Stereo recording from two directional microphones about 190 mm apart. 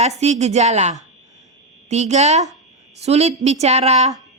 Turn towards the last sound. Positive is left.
turn(degrees=-35)  # may be behind; listen again after turning